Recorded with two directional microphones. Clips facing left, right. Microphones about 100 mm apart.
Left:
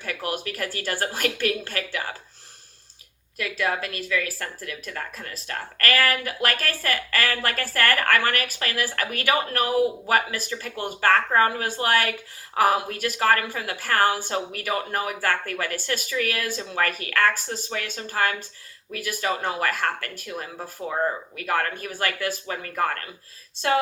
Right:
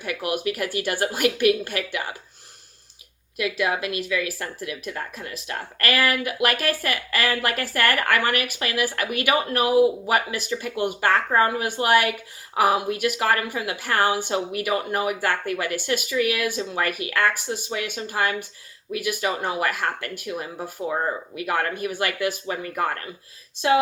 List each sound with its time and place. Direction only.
0.0 s speech: 15° right (ahead or behind)
3.6 s speech: 15° right (ahead or behind)